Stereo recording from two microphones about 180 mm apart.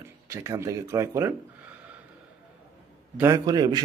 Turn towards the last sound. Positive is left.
turn(degrees=-25)  # may be behind; listen again after turning